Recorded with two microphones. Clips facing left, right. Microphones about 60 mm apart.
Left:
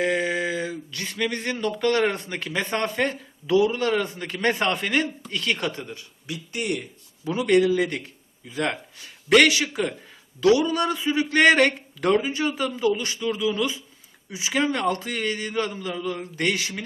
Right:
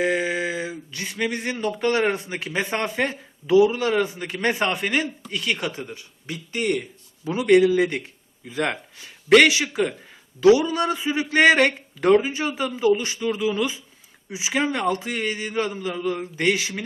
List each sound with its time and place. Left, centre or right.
0.0 s speech: centre
6.2 s speech: right
7.3 s speech: centre
8.4 s a man's voice: right